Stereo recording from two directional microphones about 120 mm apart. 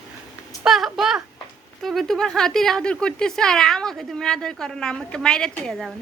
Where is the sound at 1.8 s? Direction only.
Centre (ahead or behind).